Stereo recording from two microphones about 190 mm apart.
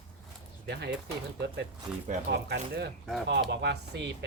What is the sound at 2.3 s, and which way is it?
Speech, 60° right (ahead or behind).